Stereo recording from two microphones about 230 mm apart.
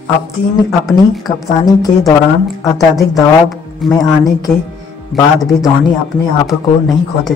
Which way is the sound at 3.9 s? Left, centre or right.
Centre.